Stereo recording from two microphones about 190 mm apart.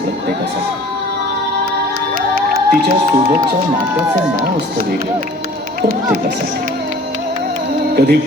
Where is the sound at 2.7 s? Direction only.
50° right (ahead or behind).